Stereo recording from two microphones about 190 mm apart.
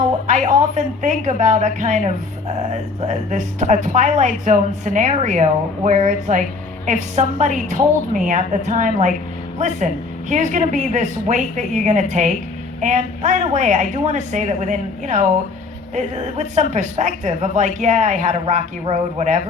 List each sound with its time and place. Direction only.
0.3 s a woman's voice: 40° right (ahead or behind)